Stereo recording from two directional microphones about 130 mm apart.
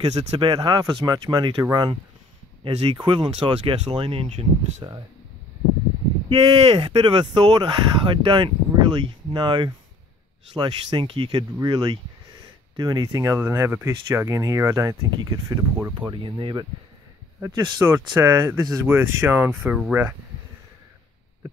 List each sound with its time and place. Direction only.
0.0 s speech: 30° right (ahead or behind); by 4.5 s 45° right (ahead or behind)
4.8 s speech: 35° right (ahead or behind)
6.2 s speech: 45° right (ahead or behind); by 15.9 s 25° right (ahead or behind)
16.1 s speech: 40° right (ahead or behind)
17.8 s speech: 20° right (ahead or behind)